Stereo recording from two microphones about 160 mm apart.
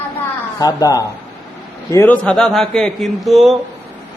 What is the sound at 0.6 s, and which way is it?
Speech, 25° left (ahead or behind).